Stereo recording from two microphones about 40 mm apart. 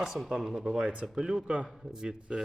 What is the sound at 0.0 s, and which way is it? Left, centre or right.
Speech, centre.